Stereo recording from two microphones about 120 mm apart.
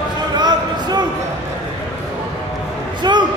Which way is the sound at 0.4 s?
35° right (ahead or behind).